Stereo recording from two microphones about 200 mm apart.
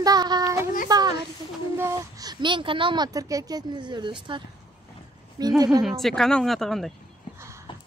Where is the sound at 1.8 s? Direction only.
15° right (ahead or behind).